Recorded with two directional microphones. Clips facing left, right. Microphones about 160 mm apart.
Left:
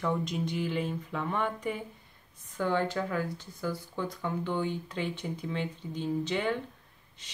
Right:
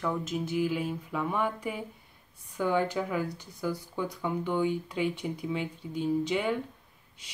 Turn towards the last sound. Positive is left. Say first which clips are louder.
# right 2 dB
turn(degrees=-10)  # may be behind; listen again after turning